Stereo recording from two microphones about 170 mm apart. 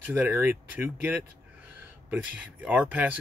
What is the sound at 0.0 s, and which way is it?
Speech, 10° right (ahead or behind).